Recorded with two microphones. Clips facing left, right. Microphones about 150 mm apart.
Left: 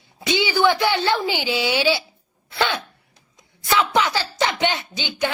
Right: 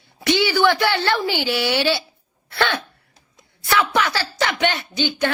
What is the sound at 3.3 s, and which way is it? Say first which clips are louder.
A woman's voice: even; 15° left (ahead or behind).